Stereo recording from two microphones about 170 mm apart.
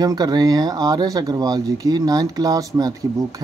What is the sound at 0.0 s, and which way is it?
Speech, 25° right (ahead or behind).